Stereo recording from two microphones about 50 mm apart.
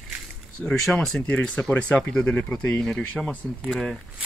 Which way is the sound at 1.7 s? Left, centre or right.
Left.